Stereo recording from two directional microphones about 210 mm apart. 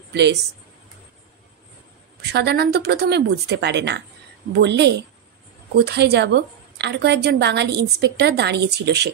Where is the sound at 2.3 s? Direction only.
50° right (ahead or behind).